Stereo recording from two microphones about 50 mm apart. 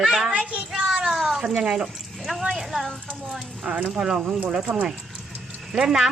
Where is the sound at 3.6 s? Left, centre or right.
Right.